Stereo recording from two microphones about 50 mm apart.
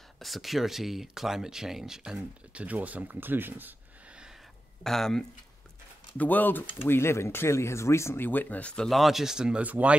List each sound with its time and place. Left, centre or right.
0.2 s speech: centre
2.5 s speech: right
4.8 s speech: centre
6.1 s speech: left
6.9 s speech: left
8.2 s speech: left
8.9 s speech: centre
9.6 s speech: right